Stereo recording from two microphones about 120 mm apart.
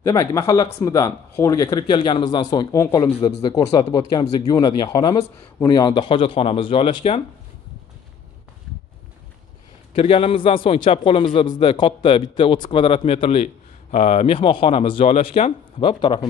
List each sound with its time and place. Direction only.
0.0 s speech: 25° left (ahead or behind)
1.9 s speech: 45° left (ahead or behind)
9.9 s speech: 55° left (ahead or behind)
15.0 s speech: 65° left (ahead or behind)
15.8 s speech: 45° left (ahead or behind)